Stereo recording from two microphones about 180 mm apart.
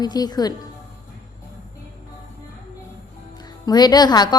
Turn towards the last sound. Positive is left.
turn(degrees=20)  # may be behind; listen again after turning